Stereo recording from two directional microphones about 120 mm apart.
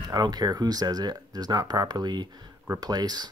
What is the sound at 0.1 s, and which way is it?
Speech, 35° right (ahead or behind).